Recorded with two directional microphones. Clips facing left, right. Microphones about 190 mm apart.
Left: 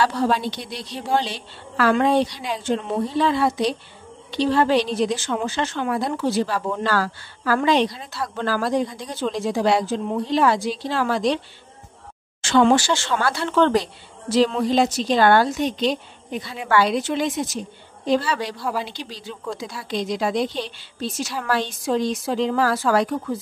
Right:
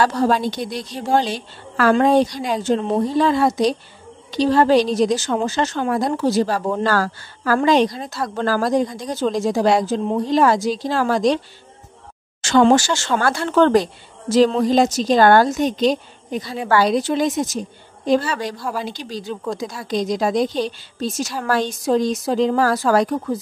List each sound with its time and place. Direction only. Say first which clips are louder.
0.0 s a woman's voice: right 3 dB; 45° right (ahead or behind)
18.6 s speech: even; 10° left (ahead or behind)
18.9 s a woman's voice: right 6 dB; 45° right (ahead or behind)